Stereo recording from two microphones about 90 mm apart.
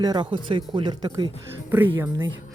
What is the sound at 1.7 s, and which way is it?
Speech, 20° right (ahead or behind).